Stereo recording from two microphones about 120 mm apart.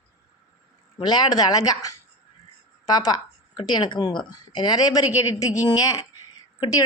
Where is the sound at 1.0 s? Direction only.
35° left (ahead or behind).